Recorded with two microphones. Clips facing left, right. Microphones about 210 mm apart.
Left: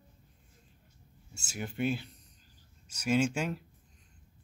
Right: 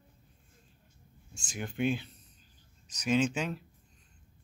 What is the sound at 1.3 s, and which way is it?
Speech, 5° left (ahead or behind).